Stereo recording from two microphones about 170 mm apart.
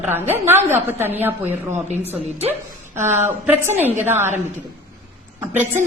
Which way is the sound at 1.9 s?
35° right (ahead or behind).